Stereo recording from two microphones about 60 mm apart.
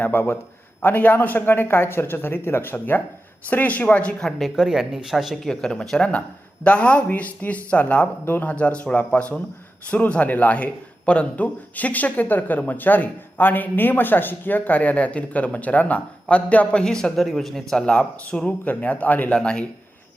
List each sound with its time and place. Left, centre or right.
0.0 s a man's voice: left
4.2 s speech: centre
4.5 s speech: centre
6.7 s a man's voice: centre
16.8 s a man's voice: centre; by 19.3 s left
19.3 s speech: centre